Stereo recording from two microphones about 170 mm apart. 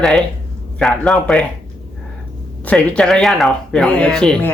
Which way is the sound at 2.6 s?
10° left (ahead or behind).